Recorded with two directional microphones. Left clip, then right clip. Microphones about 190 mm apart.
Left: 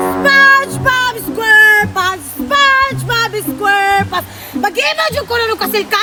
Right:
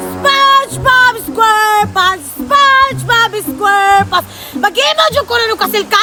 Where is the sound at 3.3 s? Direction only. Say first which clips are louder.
Right 2 dB; 25° right (ahead or behind).